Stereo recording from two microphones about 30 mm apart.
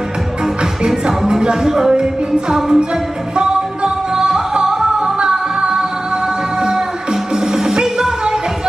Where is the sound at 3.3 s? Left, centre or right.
Right.